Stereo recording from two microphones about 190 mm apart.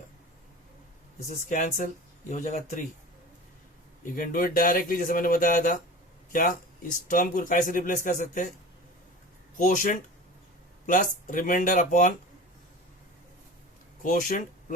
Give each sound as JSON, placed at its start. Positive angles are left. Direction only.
{"t": 1.5, "sound": "speech", "side_deg": 45}
{"t": 4.1, "sound": "speech", "side_deg": 45}
{"t": 9.6, "sound": "speech", "side_deg": 45}
{"t": 14.0, "sound": "speech", "side_deg": 45}